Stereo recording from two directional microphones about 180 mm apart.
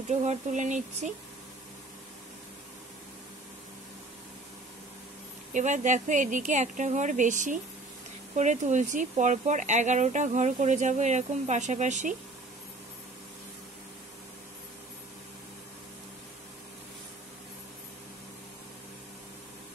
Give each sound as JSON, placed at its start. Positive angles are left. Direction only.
{"t": 0.1, "sound": "speech", "side_deg": -40}
{"t": 5.5, "sound": "speech", "side_deg": -45}